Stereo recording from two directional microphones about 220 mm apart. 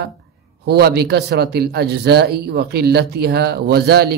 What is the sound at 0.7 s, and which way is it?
A man's voice, 45° right (ahead or behind).